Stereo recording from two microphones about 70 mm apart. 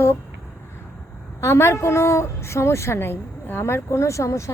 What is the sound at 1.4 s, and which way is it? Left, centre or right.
A woman's voice, left.